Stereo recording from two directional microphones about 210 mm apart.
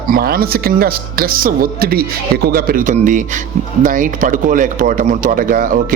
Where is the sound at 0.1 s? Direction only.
45° right (ahead or behind).